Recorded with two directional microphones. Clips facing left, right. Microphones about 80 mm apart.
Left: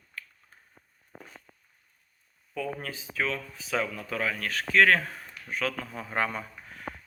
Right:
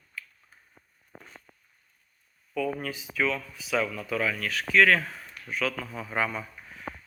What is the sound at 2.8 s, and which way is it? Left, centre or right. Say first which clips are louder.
Speech: right 3 dB; left.